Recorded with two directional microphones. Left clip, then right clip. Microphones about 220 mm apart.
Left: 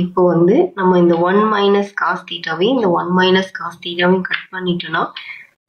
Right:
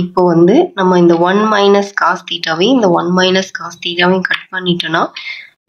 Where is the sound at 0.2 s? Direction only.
35° right (ahead or behind).